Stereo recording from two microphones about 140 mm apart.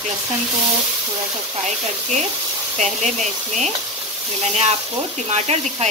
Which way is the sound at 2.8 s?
55° right (ahead or behind).